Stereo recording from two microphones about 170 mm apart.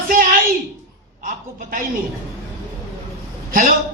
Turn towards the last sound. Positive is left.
turn(degrees=-55)  # may be behind; listen again after turning